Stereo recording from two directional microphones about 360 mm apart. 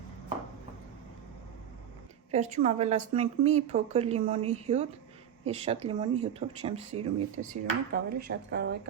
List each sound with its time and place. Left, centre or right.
2.3 s speech: centre